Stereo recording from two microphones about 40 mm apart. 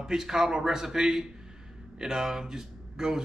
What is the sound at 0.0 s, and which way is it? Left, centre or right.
A man's voice, centre.